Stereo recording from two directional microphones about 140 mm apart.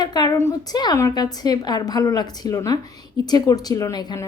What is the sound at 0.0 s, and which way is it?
A woman's voice, 30° left (ahead or behind).